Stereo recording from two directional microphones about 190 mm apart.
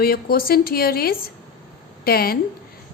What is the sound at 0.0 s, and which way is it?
A woman's voice, 50° left (ahead or behind).